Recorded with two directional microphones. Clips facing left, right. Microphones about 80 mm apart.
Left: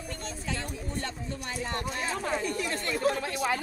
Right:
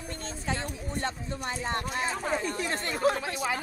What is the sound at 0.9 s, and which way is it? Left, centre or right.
Speech, right.